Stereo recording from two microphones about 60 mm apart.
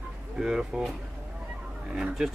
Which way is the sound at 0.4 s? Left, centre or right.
Centre.